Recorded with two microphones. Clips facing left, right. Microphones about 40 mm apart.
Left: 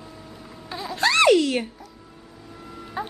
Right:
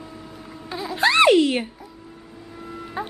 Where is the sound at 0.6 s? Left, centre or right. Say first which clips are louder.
Right 2 dB; centre.